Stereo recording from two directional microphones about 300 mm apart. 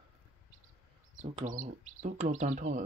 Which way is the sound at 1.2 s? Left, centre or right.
Right.